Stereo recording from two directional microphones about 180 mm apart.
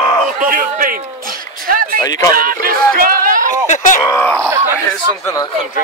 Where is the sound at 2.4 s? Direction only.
50° right (ahead or behind).